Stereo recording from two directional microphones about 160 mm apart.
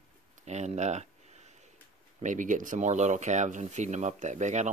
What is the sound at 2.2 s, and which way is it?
Speech, 50° right (ahead or behind).